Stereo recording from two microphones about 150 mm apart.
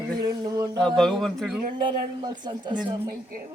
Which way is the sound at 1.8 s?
30° right (ahead or behind).